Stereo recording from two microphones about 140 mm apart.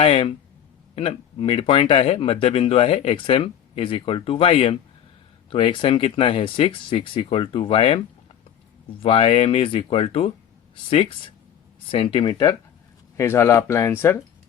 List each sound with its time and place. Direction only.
0.0 s speech: 45° left (ahead or behind)
13.1 s speech: 20° left (ahead or behind)